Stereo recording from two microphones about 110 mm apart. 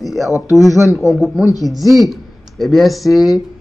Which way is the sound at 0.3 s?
30° left (ahead or behind).